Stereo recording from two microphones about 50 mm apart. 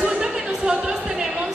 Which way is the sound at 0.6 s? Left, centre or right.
Centre.